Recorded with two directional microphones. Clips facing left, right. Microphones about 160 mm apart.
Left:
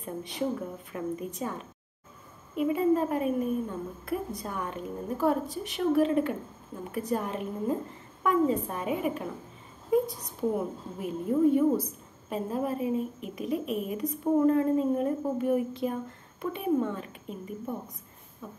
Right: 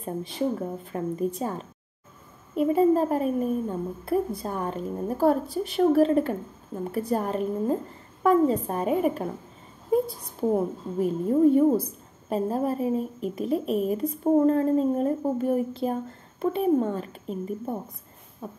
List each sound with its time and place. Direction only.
0.0 s a woman's voice: 30° right (ahead or behind)
10.5 s a woman's voice: 35° right (ahead or behind)